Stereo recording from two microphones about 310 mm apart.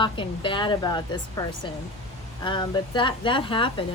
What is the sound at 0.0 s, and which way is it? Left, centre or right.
Speech, centre.